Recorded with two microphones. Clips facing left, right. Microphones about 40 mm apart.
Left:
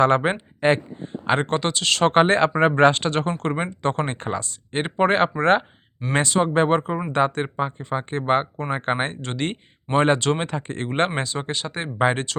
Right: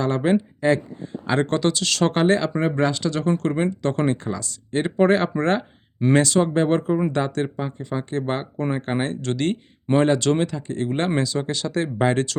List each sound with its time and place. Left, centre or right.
0.0 s speech: left
3.7 s speech: left
4.2 s speech: left
4.4 s speech: left
6.1 s speech: left
9.2 s speech: left
10.5 s speech: left